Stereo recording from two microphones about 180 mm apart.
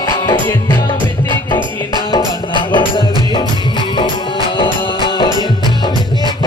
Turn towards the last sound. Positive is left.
turn(degrees=30)  # may be behind; listen again after turning